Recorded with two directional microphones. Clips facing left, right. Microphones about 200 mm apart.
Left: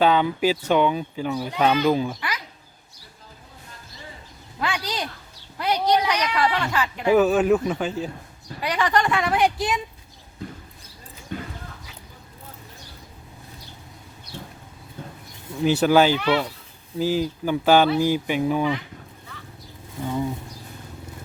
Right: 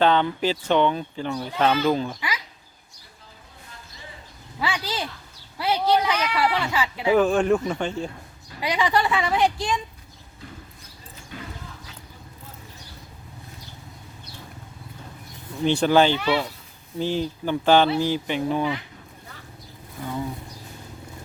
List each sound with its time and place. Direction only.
0.0 s a child's voice: 10° left (ahead or behind)
4.6 s speech: 5° right (ahead or behind)
5.7 s a child's voice: 15° left (ahead or behind)
6.3 s speech: 10° right (ahead or behind)
7.1 s speech: 5° left (ahead or behind)
8.6 s speech: 10° right (ahead or behind)
11.3 s dog: 50° left (ahead or behind)
15.6 s a child's voice: 5° left (ahead or behind)
16.2 s speech: 10° right (ahead or behind)
17.0 s a child's voice: 5° left (ahead or behind)
20.0 s bee: 20° left (ahead or behind)